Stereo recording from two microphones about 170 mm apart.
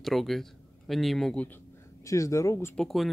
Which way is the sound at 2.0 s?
20° left (ahead or behind).